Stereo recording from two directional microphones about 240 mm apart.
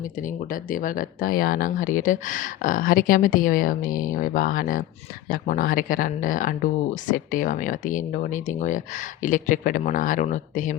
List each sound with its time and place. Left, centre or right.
0.0 s speech: left